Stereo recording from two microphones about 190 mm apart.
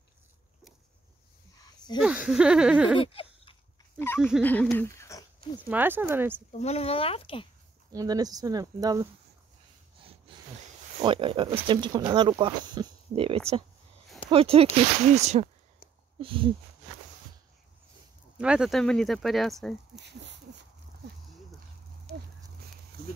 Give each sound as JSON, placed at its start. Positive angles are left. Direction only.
{"t": 1.6, "sound": "a sound", "side_deg": 20}
{"t": 2.0, "sound": "speech", "side_deg": -5}
{"t": 3.0, "sound": "a sound", "side_deg": 30}
{"t": 4.0, "sound": "speech", "side_deg": 10}
{"t": 5.6, "sound": "speech", "side_deg": -10}
{"t": 6.5, "sound": "speech", "side_deg": 35}
{"t": 7.9, "sound": "speech", "side_deg": -20}
{"t": 10.3, "sound": "a sound", "side_deg": -30}
{"t": 11.0, "sound": "speech", "side_deg": -25}
{"t": 18.4, "sound": "speech", "side_deg": -5}
{"t": 20.0, "sound": "speech", "side_deg": -65}